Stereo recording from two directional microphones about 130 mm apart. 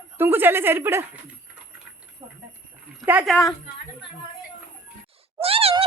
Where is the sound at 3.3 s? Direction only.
5° left (ahead or behind).